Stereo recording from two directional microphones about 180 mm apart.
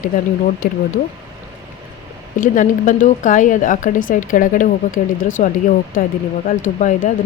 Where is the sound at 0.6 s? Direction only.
50° left (ahead or behind).